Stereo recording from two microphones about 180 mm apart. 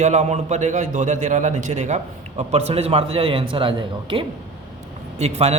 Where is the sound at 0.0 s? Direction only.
40° right (ahead or behind).